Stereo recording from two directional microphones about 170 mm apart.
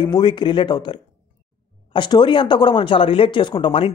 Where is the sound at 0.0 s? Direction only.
30° left (ahead or behind).